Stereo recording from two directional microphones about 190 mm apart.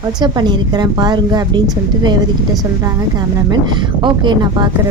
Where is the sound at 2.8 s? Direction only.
20° right (ahead or behind).